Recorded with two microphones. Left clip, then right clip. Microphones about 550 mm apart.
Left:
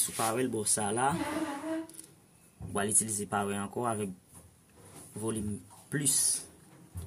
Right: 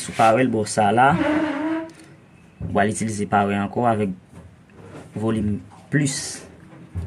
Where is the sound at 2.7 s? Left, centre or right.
Left.